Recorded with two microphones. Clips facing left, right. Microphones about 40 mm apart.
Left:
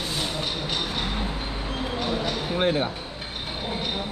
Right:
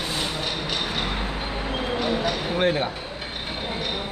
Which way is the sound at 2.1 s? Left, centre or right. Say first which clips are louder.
Right 2 dB; right.